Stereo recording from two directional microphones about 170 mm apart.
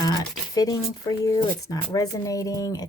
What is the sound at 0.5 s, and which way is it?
Speech, 20° left (ahead or behind).